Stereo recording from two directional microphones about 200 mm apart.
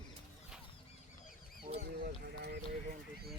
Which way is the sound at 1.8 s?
50° right (ahead or behind).